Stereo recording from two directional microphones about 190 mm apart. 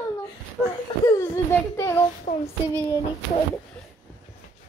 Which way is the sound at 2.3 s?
40° left (ahead or behind).